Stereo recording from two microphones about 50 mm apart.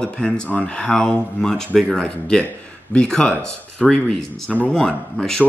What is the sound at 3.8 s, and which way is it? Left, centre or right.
Speech, centre.